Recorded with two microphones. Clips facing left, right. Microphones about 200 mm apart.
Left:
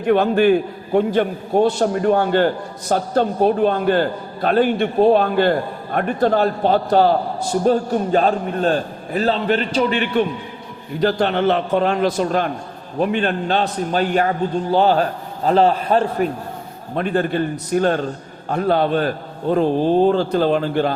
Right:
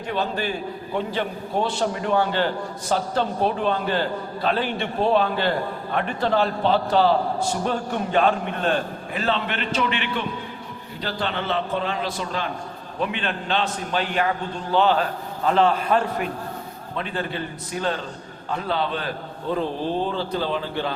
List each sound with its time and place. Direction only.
0.0 s a man's voice: 55° left (ahead or behind); by 16.3 s 35° left (ahead or behind)
16.9 s a man's voice: 50° left (ahead or behind)